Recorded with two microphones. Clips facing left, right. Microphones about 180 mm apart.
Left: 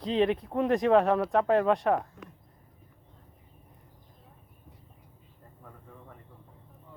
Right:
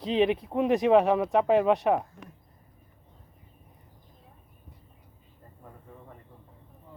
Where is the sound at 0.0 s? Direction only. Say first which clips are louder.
Right 1 dB; 20° right (ahead or behind).